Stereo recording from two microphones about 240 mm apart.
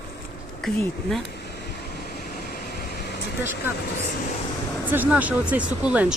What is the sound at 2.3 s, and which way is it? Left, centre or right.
Vehicle, left.